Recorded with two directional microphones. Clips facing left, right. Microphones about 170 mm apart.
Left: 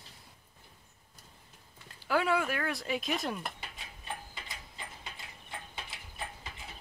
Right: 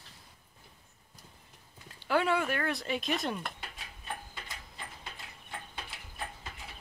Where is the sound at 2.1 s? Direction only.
Centre (ahead or behind).